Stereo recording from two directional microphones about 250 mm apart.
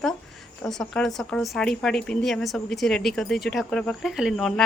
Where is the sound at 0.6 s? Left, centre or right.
Centre.